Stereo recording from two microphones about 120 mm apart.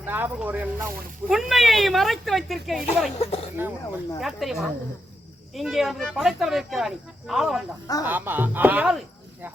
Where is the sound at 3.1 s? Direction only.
55° left (ahead or behind).